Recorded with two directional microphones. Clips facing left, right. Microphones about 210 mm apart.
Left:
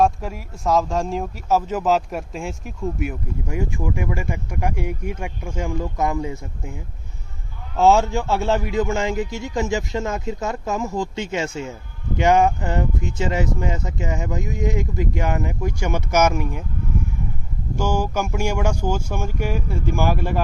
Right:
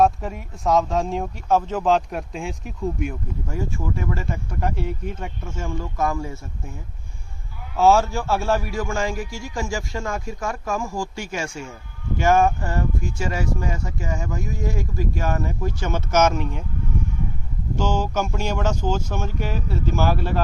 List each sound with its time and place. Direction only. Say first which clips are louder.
0.0 s speech: even; centre (ahead or behind); by 6.7 s 15° left (ahead or behind)
7.8 s speech: left 1 dB; 20° left (ahead or behind)
17.7 s speech: left 1 dB; 10° left (ahead or behind)